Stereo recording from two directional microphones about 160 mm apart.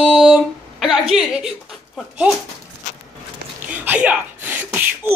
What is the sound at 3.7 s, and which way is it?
Sneeze, 10° right (ahead or behind).